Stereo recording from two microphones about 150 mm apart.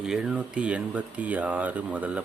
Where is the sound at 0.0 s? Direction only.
5° right (ahead or behind).